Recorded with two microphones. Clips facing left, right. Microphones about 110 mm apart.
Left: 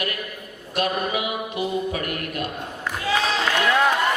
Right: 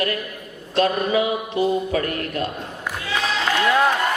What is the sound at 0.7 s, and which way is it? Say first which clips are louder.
Mantra: right 5 dB; 30° right (ahead or behind).